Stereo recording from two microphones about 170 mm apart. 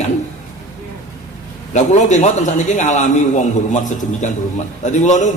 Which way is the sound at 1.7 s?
45° left (ahead or behind).